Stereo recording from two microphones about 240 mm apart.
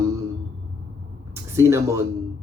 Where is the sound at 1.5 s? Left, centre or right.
Centre.